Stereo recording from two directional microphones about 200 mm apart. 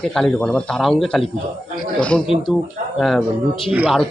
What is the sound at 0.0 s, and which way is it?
Speech, centre (ahead or behind).